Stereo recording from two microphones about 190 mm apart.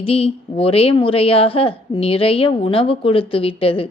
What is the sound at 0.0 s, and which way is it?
A woman's voice, 30° left (ahead or behind).